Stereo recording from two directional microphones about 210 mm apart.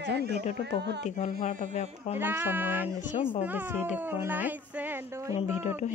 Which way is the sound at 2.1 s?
10° right (ahead or behind).